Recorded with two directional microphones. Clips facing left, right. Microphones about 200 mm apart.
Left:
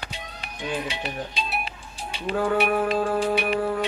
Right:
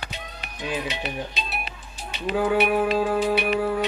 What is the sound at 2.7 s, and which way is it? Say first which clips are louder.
Music: right 1 dB; 10° right (ahead or behind).